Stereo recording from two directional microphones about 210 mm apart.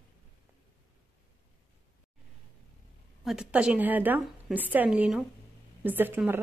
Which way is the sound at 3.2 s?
5° right (ahead or behind).